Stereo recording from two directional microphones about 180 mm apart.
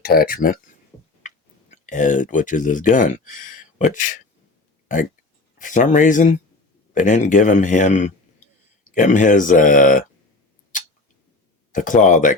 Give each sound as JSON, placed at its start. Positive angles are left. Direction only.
{"t": 0.0, "sound": "speech", "side_deg": 55}
{"t": 0.9, "sound": "a sound", "side_deg": 15}
{"t": 1.7, "sound": "speech", "side_deg": 45}
{"t": 5.5, "sound": "speech", "side_deg": 45}
{"t": 11.7, "sound": "speech", "side_deg": 45}